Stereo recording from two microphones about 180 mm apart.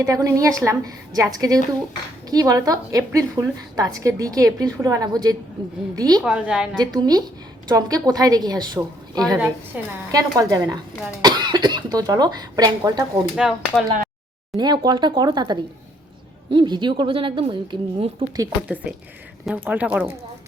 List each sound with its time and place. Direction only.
0.0 s a woman's voice: 20° right (ahead or behind)
6.2 s a woman's voice: 5° right (ahead or behind)
6.7 s speech: 20° right (ahead or behind)
13.3 s a woman's voice: 5° right (ahead or behind)
14.5 s speech: 25° right (ahead or behind)
18.7 s a woman's voice: 10° right (ahead or behind)